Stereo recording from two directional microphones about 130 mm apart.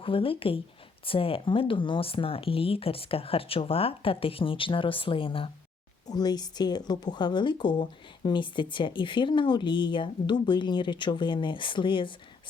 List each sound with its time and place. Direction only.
0.0 s speech: 45° left (ahead or behind)
6.1 s speech: 30° left (ahead or behind)